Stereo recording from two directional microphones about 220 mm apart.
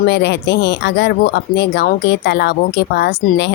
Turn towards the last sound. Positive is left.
turn(degrees=45)  # may be behind; listen again after turning